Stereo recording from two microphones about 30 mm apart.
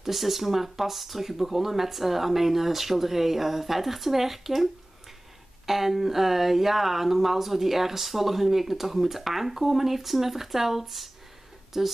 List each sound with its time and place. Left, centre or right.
0.0 s speech: centre
5.7 s speech: centre